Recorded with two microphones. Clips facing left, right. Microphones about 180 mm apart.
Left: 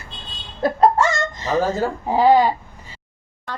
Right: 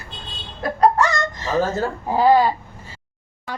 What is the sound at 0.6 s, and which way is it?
Speech, 25° left (ahead or behind).